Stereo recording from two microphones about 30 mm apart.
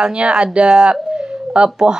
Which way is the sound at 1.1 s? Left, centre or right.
Right.